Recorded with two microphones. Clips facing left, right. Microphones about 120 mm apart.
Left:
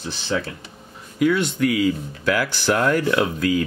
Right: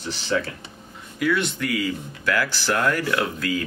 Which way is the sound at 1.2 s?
25° left (ahead or behind).